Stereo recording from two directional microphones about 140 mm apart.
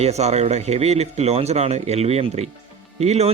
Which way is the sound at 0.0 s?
50° right (ahead or behind).